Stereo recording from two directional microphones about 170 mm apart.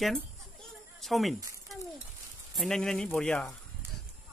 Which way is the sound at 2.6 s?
5° left (ahead or behind).